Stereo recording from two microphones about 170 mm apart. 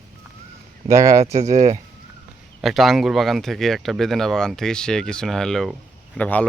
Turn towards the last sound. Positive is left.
turn(degrees=10)  # may be behind; listen again after turning